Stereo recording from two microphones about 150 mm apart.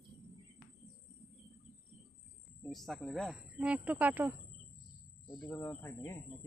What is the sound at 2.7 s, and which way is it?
Speech, centre (ahead or behind).